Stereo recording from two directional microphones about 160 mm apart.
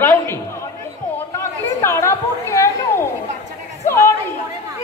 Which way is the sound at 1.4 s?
15° left (ahead or behind).